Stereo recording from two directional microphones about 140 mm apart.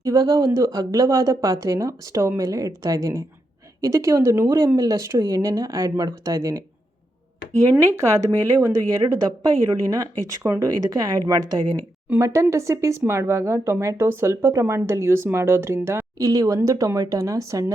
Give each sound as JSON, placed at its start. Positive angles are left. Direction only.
{"t": 0.0, "sound": "speech", "side_deg": -25}
{"t": 4.4, "sound": "speech", "side_deg": -30}
{"t": 7.9, "sound": "speech", "side_deg": -20}